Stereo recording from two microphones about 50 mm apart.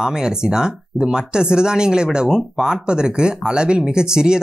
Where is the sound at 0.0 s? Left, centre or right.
Centre.